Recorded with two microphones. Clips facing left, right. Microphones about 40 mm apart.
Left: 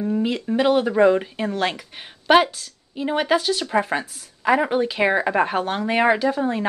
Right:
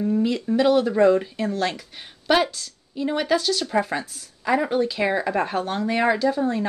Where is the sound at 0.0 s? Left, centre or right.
Left.